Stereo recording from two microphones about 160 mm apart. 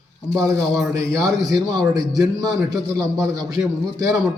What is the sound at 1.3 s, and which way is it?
A man's voice, 25° right (ahead or behind).